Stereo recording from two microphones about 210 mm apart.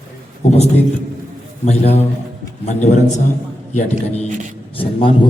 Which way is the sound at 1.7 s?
30° left (ahead or behind).